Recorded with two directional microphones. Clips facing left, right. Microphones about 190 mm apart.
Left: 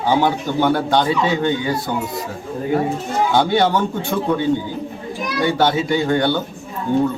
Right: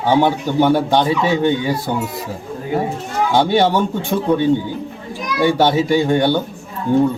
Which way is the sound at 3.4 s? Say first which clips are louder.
Right 3 dB; 20° right (ahead or behind).